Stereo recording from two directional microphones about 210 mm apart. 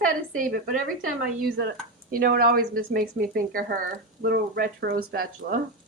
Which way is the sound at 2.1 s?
45° right (ahead or behind).